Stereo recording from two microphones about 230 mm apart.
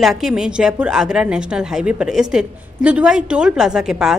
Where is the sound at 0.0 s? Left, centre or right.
Centre.